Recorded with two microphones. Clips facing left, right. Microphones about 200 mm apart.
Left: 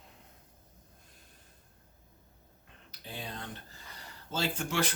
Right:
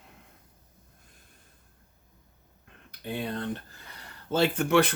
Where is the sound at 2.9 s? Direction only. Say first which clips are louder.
Right 10 dB; 60° right (ahead or behind).